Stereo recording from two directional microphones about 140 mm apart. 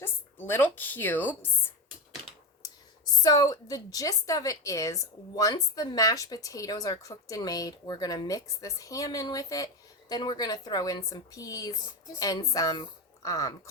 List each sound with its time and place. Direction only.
0.0 s speech: 15° left (ahead or behind)
3.2 s a woman's voice: 25° left (ahead or behind)